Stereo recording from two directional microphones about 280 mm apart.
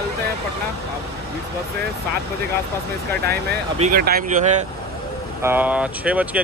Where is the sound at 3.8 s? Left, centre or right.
Right.